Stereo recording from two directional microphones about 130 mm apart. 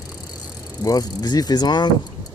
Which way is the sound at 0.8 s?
30° left (ahead or behind).